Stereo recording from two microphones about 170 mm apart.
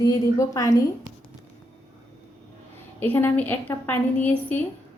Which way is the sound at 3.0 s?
10° left (ahead or behind).